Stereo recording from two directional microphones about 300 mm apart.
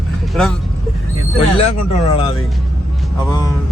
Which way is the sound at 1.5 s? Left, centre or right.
Centre.